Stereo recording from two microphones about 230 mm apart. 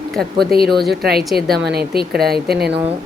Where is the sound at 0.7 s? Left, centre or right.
Centre.